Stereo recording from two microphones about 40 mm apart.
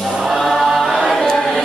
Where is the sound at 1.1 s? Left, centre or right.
Centre.